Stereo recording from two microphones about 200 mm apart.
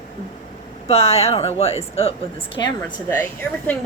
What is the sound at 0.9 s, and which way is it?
Speech, 30° left (ahead or behind).